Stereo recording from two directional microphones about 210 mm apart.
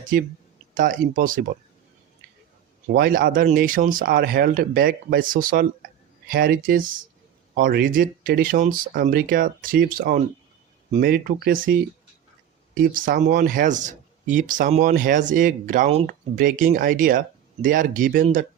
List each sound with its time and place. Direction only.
0.7 s speech: 40° right (ahead or behind)
2.8 s speech: 45° right (ahead or behind)